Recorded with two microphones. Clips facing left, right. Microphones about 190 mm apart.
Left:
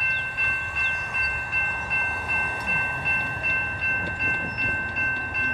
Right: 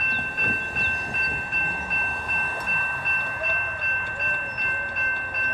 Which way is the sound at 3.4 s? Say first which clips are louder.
Right 2 dB; 50° right (ahead or behind).